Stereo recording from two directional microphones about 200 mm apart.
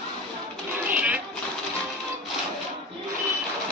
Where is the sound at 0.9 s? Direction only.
5° right (ahead or behind).